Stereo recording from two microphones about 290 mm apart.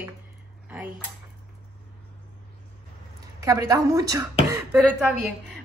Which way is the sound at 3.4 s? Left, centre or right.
Centre.